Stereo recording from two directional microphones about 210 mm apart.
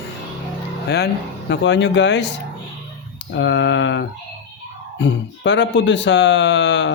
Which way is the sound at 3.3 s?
60° left (ahead or behind).